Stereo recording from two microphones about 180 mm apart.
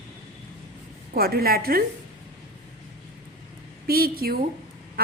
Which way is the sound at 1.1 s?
55° right (ahead or behind).